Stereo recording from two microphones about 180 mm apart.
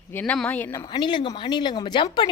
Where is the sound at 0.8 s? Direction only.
25° left (ahead or behind).